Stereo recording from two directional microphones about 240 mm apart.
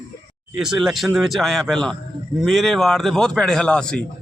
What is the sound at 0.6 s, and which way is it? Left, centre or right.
A man's voice, centre.